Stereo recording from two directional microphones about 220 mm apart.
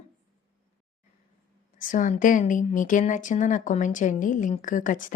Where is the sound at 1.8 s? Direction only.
35° left (ahead or behind).